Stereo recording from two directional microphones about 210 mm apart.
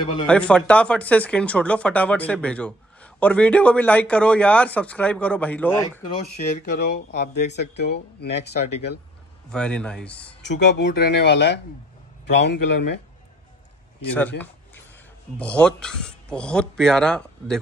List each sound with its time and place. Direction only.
0.0 s speech: 20° left (ahead or behind)
0.3 s speech: 5° left (ahead or behind)
6.4 s speech: 35° left (ahead or behind)
6.9 s speech: 50° left (ahead or behind)
9.5 s speech: 5° left (ahead or behind)
10.4 s speech: 55° left (ahead or behind)
15.3 s speech: 5° left (ahead or behind)